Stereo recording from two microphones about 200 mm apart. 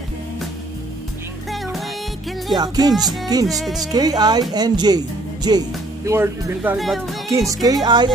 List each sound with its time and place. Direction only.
2.5 s speech: 20° right (ahead or behind)
2.9 s speech: centre (ahead or behind)
3.9 s speech: 20° right (ahead or behind); by 7.2 s centre (ahead or behind)
7.2 s speech: 15° right (ahead or behind)